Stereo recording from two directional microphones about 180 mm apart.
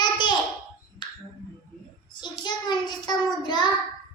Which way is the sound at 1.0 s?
25° left (ahead or behind).